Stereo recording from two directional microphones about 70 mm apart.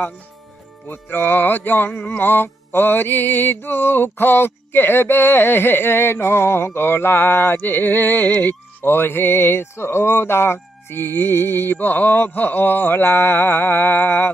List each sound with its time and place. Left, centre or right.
0.8 s music: left